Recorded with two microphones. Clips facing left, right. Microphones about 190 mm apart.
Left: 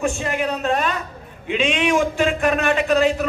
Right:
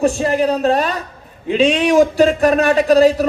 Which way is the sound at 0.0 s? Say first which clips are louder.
Right 7 dB; 35° right (ahead or behind).